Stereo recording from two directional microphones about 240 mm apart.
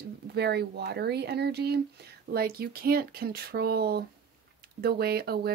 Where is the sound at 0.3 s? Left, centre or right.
Right.